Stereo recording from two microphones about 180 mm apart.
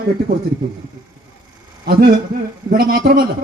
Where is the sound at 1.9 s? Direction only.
60° right (ahead or behind).